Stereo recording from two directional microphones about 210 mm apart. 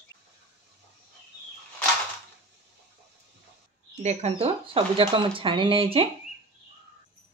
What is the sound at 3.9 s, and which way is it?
Speech, 30° right (ahead or behind).